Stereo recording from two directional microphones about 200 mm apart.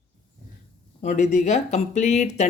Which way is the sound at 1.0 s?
35° left (ahead or behind).